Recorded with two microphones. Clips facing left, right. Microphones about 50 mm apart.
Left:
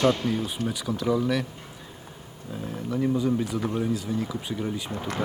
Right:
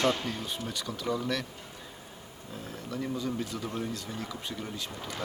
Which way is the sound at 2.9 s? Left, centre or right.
Centre.